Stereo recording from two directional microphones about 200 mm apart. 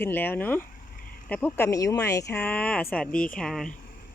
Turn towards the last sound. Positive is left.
turn(degrees=0)  # may be behind; listen again after turning